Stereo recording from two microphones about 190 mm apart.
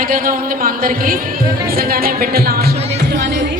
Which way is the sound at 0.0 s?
50° right (ahead or behind).